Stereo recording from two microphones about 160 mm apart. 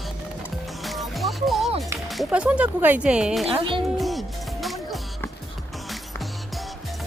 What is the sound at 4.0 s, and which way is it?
Music, centre (ahead or behind).